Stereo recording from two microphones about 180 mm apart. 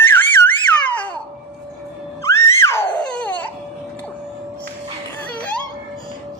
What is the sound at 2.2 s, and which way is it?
Music, 15° left (ahead or behind).